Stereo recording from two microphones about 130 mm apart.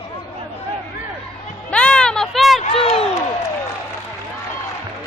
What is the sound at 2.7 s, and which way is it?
Crowd, 50° left (ahead or behind).